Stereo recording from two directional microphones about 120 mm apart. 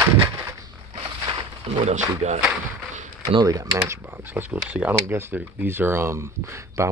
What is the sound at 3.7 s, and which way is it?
Speech, 20° right (ahead or behind).